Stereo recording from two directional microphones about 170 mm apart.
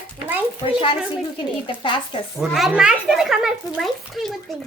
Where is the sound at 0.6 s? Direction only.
30° left (ahead or behind).